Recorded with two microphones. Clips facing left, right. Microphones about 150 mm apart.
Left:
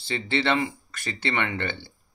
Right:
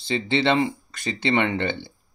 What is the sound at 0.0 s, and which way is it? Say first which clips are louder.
Speech: right 4 dB; 20° right (ahead or behind).